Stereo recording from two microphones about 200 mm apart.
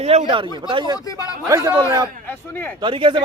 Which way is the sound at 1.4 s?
15° right (ahead or behind).